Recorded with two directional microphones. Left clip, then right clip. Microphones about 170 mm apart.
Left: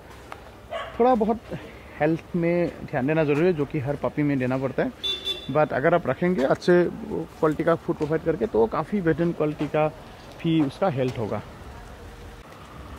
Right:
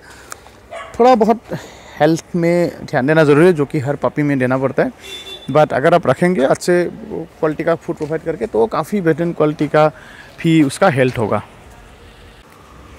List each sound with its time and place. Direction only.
0.9 s speech: 35° right (ahead or behind)
1.2 s speech: 45° right (ahead or behind)
6.5 s speech: 10° right (ahead or behind)
8.5 s speech: 20° right (ahead or behind)
9.4 s speech: 40° right (ahead or behind)